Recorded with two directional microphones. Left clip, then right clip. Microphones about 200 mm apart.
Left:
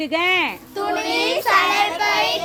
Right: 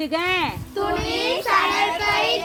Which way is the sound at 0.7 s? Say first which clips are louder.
Left 2 dB; 60° left (ahead or behind).